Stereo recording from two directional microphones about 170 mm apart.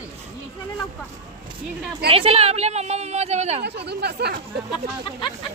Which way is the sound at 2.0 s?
35° right (ahead or behind).